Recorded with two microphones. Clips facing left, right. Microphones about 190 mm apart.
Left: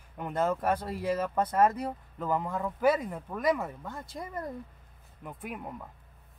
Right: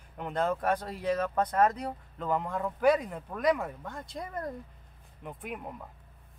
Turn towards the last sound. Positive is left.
turn(degrees=0)  # may be behind; listen again after turning